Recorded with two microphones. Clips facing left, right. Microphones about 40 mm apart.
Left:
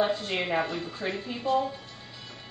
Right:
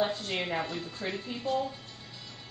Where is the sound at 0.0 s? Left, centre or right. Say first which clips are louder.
Left 3 dB; centre.